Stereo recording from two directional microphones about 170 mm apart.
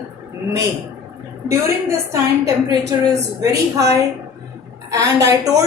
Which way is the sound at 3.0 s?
20° right (ahead or behind).